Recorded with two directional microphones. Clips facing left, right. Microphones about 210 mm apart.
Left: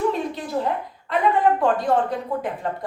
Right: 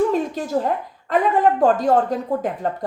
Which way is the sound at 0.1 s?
45° right (ahead or behind).